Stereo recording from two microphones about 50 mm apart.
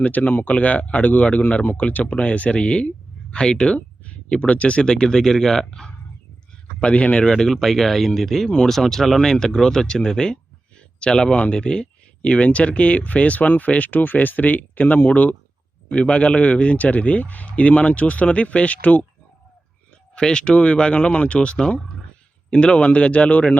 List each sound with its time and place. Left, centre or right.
0.0 s speech: left; by 5.9 s centre
6.7 s speech: left; by 8.4 s centre
8.4 s speech: centre; by 15.4 s left
15.9 s speech: left
20.1 s speech: centre